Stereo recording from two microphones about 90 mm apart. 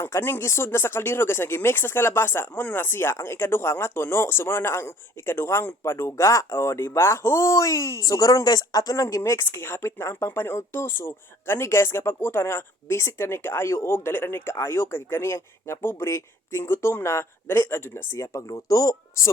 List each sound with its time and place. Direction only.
0.0 s speech: 30° left (ahead or behind)